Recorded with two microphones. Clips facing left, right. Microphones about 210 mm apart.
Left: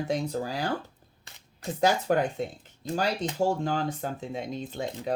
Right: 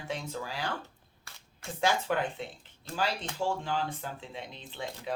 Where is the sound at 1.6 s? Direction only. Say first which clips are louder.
Left 5 dB; 40° left (ahead or behind).